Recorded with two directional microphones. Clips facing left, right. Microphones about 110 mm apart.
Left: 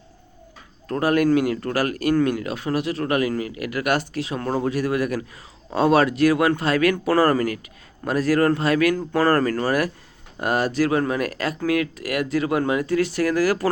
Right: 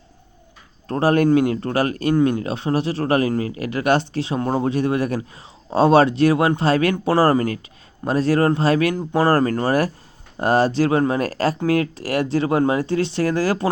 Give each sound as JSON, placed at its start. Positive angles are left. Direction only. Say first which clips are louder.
{"t": 0.9, "sound": "speech", "louder": "right 2 dB", "side_deg": -30}